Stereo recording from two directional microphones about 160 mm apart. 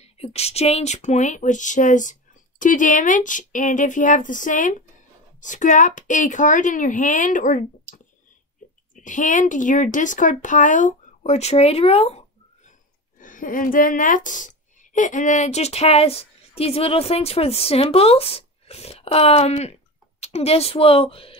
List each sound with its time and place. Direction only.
0.0 s speech: 40° left (ahead or behind)
13.2 s a woman's voice: 55° left (ahead or behind); by 21.4 s 35° left (ahead or behind)